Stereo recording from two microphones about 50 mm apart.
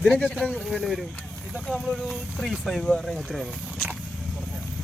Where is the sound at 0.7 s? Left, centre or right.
Centre.